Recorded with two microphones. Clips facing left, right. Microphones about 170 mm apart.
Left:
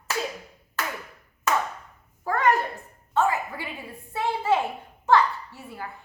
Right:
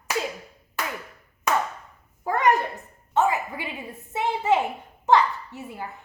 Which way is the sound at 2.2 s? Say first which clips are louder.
Right 1 dB; 20° right (ahead or behind).